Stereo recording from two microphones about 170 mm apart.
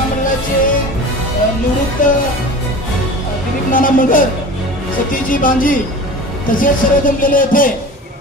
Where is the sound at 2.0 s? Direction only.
50° left (ahead or behind).